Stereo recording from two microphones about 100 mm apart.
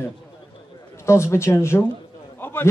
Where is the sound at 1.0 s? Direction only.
30° left (ahead or behind).